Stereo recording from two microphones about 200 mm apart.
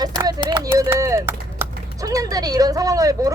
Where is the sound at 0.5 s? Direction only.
15° right (ahead or behind).